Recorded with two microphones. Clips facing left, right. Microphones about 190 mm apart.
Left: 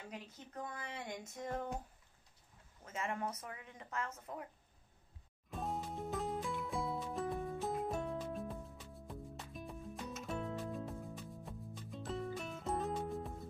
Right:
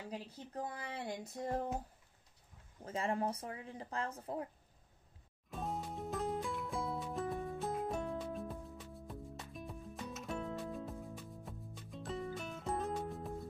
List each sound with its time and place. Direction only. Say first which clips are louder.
0.1 s speech: right 4 dB; 30° right (ahead or behind)
2.8 s speech: right 4 dB; 35° right (ahead or behind)
5.5 s music: even; centre (ahead or behind)